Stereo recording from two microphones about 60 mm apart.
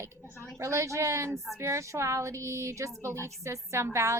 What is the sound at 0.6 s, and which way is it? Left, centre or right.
A woman's voice, right.